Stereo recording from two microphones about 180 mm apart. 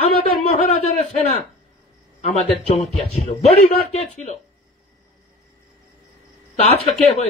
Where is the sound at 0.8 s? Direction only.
35° left (ahead or behind).